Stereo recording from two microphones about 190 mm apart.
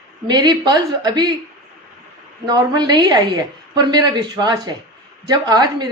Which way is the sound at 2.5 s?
20° right (ahead or behind).